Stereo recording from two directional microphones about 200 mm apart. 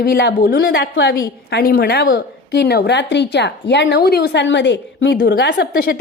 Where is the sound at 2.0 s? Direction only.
60° left (ahead or behind).